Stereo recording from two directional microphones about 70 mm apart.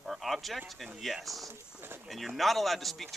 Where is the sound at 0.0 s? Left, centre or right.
Centre.